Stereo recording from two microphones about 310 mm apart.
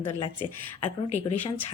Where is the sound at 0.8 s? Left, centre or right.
Left.